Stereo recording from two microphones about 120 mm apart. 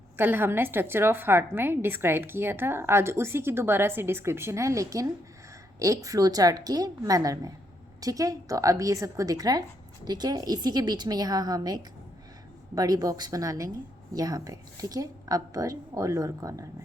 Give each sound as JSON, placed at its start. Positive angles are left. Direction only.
{"t": 0.2, "sound": "a woman's voice", "side_deg": -15}